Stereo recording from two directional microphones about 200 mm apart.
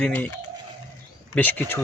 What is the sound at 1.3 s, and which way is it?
Speech, 10° left (ahead or behind).